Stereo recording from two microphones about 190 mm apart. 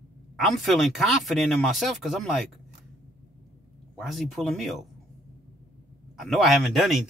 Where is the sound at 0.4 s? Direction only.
Centre (ahead or behind).